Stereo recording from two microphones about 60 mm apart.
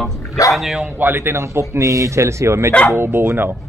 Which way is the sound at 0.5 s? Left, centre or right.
Centre.